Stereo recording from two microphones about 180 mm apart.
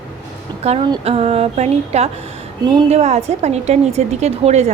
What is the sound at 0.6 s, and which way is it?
A woman's voice, 35° right (ahead or behind).